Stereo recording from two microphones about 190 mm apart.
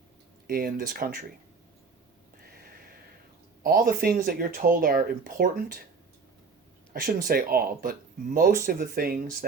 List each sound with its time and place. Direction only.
0.4 s speech: 50° right (ahead or behind)
2.4 s a sound: 50° right (ahead or behind)
3.6 s speech: 50° right (ahead or behind)
6.9 s speech: 50° right (ahead or behind)